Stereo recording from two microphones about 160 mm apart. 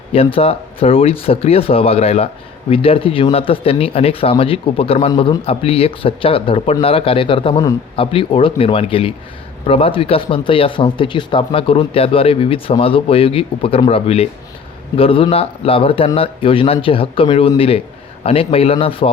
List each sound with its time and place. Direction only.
0.1 s speech: 35° left (ahead or behind)